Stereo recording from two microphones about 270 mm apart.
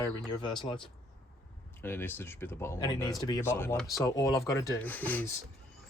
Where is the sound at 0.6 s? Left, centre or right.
Centre.